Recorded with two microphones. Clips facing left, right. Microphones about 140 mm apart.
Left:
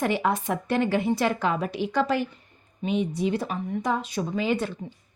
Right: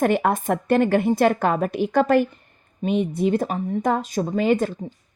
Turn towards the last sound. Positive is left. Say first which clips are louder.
# right 6 dB
turn(degrees=-50)  # may be behind; listen again after turning